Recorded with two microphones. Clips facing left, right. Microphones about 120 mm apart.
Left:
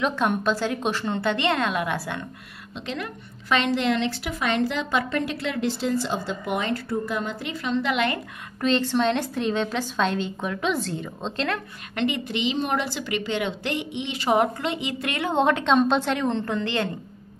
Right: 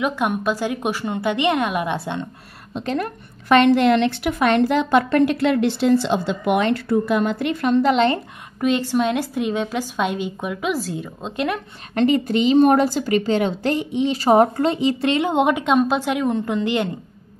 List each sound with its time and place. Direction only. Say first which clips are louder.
0.0 s a woman's voice: right 2 dB; 10° right (ahead or behind)
2.7 s a woman's voice: right 8 dB; 45° right (ahead or behind)
7.8 s a woman's voice: right 7 dB; 35° right (ahead or behind)
8.5 s a woman's voice: right 3 dB; 10° right (ahead or behind)
11.9 s a woman's voice: right 8 dB; 40° right (ahead or behind); by 16.9 s 15° right (ahead or behind)